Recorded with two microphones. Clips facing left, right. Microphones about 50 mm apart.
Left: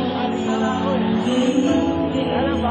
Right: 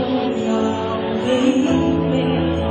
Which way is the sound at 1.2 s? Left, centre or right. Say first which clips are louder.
Right 5 dB; right.